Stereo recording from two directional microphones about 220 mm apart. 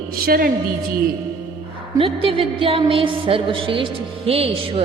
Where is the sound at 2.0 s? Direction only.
25° right (ahead or behind).